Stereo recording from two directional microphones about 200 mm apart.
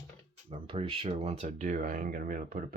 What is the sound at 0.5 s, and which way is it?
Speech, 25° right (ahead or behind).